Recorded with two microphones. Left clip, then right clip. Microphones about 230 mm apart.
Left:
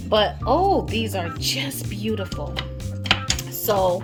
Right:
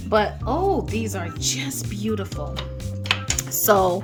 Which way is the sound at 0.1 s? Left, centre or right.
Centre.